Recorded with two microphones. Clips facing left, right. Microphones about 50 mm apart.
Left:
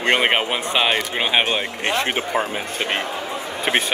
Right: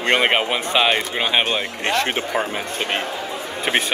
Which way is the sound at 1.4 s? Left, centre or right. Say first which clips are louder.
Even; left.